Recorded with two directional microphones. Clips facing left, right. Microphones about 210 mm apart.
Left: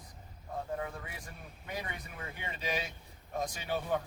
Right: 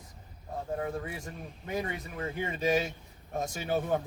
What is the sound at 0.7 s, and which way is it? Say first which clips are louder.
Speech: right 6 dB; 40° right (ahead or behind).